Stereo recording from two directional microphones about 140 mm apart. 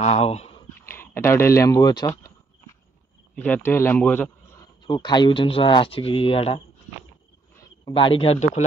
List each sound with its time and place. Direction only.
0.0 s speech: 50° left (ahead or behind)
0.8 s speech: 15° left (ahead or behind)
3.3 s a man's voice: 10° left (ahead or behind)
4.6 s speech: 30° left (ahead or behind)
7.8 s speech: 35° left (ahead or behind)